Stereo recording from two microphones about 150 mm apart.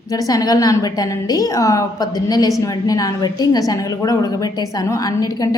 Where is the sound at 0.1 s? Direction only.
25° left (ahead or behind).